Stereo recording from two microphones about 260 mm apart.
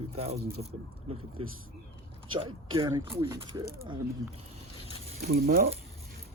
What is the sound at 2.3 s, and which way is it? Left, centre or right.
Speech, centre.